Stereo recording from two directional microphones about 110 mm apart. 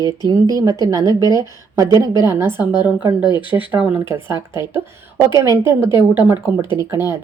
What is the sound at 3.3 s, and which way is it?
Speech, 45° left (ahead or behind).